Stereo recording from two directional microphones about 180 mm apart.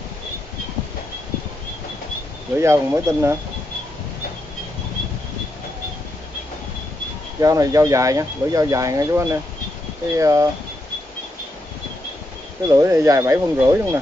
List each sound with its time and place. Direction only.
2.5 s speech: 15° right (ahead or behind)
7.3 s speech: 20° right (ahead or behind)
12.6 s speech: 20° right (ahead or behind)